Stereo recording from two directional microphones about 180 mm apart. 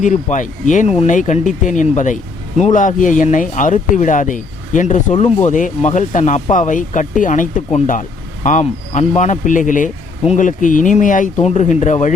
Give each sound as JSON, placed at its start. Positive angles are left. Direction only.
{"t": 0.0, "sound": "speech", "side_deg": 45}